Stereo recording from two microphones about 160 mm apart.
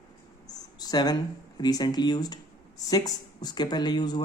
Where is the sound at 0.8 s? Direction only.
25° left (ahead or behind).